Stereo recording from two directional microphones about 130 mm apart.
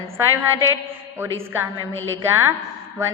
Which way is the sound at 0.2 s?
20° right (ahead or behind).